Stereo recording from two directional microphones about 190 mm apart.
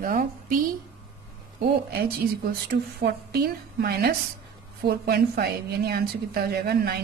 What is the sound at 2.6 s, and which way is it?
A woman's voice, 55° right (ahead or behind).